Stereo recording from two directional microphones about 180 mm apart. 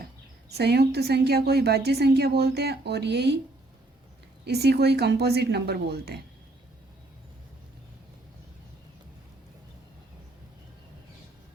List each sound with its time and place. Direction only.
0.5 s a woman's voice: 65° right (ahead or behind)
4.4 s a woman's voice: 65° right (ahead or behind)